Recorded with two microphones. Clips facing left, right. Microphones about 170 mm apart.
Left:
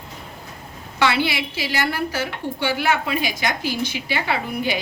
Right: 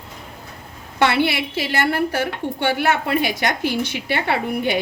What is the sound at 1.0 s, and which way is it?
A woman's voice, 55° right (ahead or behind).